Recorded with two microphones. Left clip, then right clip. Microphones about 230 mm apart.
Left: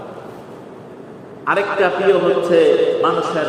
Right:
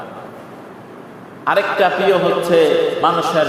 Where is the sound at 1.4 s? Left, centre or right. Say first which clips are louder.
Right 2 dB; right.